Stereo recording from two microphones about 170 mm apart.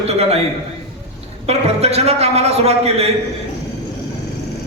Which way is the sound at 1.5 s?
35° right (ahead or behind).